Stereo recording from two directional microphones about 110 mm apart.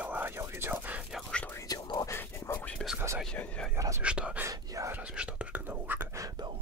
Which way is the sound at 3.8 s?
25° right (ahead or behind).